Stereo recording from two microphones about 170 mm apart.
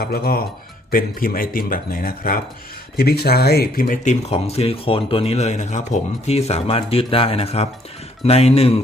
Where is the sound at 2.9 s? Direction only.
70° left (ahead or behind).